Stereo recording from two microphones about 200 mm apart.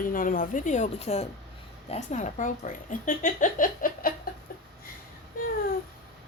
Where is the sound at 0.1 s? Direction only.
45° left (ahead or behind).